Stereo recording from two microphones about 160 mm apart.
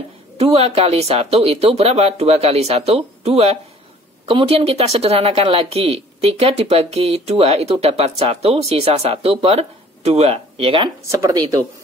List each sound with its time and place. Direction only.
0.4 s speech: 40° right (ahead or behind)
11.1 s speech: 20° right (ahead or behind)